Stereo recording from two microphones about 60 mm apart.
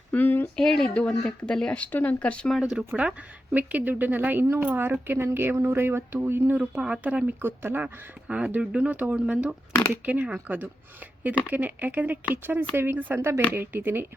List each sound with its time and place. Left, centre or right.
0.1 s a sound: left
0.5 s speech: centre
1.8 s speech: left
2.6 s speech: centre
2.9 s speech: right
6.8 s speech: right
13.1 s speech: right